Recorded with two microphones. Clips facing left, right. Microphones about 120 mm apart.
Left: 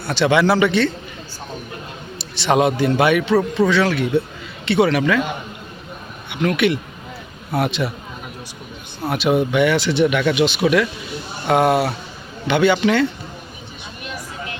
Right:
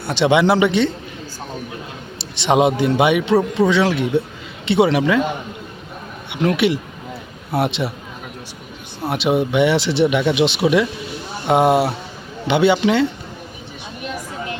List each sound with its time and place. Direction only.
0.1 s speech: 25° right (ahead or behind)
2.1 s a man's voice: 20° right (ahead or behind)
6.3 s speech: 30° right (ahead or behind)
9.0 s speech: 25° right (ahead or behind)